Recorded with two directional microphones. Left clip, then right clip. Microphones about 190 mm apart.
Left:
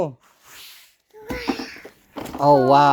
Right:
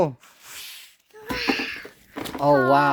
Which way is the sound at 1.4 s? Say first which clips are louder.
Right 4 dB; 15° right (ahead or behind).